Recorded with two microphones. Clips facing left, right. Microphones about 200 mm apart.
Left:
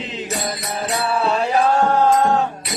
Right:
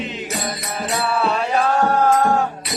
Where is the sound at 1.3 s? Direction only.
30° left (ahead or behind).